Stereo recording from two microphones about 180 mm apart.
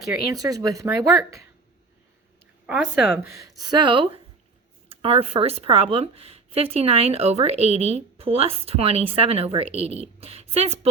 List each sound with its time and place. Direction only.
0.3 s speech: 20° right (ahead or behind)
2.6 s speech: 5° right (ahead or behind)
3.6 s speech: 25° right (ahead or behind)